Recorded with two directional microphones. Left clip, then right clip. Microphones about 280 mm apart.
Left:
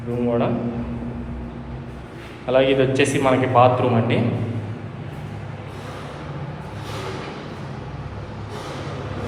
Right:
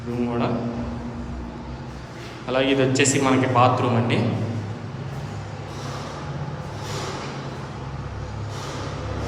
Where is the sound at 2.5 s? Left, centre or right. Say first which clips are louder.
Left 4 dB; centre.